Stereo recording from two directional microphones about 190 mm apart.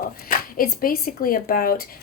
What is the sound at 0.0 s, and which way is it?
Speech, 50° left (ahead or behind).